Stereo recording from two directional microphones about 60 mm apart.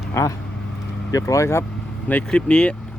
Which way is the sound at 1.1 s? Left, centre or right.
Left.